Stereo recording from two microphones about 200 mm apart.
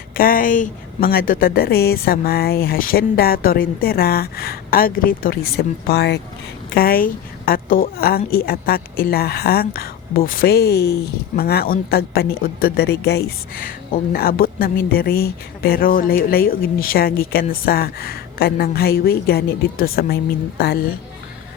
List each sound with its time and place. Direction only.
0.2 s speech: 45° left (ahead or behind)